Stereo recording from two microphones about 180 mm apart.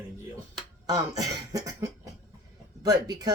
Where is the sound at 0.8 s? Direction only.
20° right (ahead or behind).